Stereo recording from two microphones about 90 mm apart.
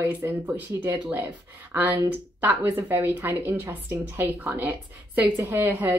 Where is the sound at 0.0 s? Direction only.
25° right (ahead or behind).